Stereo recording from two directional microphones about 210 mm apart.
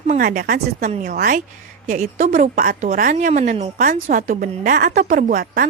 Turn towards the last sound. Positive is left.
turn(degrees=-40)  # may be behind; listen again after turning